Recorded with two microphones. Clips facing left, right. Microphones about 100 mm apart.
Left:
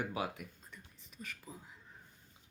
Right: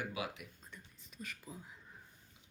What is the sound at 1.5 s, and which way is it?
Speech, 35° left (ahead or behind).